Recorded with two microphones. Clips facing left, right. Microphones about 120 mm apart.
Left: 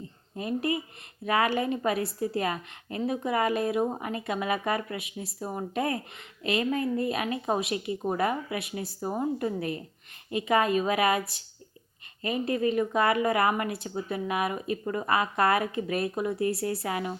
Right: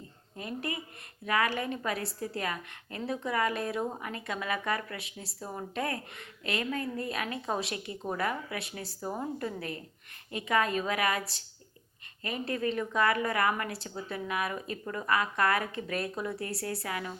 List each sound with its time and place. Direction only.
0.3 s speech: 20° left (ahead or behind)
12.2 s speech: 20° left (ahead or behind)